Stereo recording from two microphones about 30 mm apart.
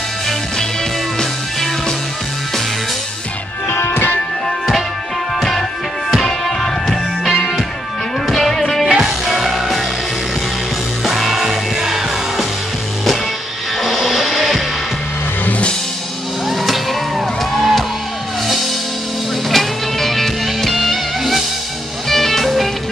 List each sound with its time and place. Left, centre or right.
6.4 s music: centre
8.8 s music: centre
9.2 s music: centre
11.1 s music: centre
13.8 s music: centre
16.4 s music: centre
19.5 s music: centre